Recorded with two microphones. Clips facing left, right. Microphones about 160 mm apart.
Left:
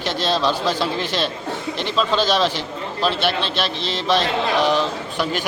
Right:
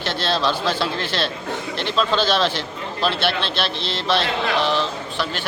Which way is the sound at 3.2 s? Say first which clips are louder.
Left 1 dB; 40° left (ahead or behind).